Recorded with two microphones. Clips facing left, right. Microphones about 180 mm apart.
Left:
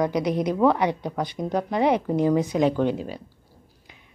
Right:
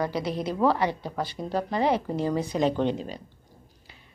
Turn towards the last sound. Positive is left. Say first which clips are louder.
# left 2 dB
turn(degrees=10)  # may be behind; listen again after turning